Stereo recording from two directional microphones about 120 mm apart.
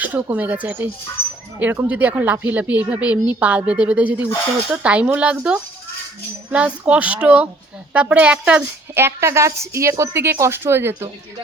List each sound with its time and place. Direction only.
0.0 s a woman's voice: 15° right (ahead or behind)